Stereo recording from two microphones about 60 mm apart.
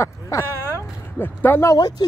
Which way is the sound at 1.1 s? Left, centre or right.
Left.